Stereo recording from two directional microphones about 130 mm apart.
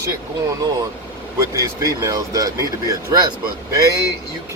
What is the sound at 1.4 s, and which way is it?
Speech, 25° right (ahead or behind).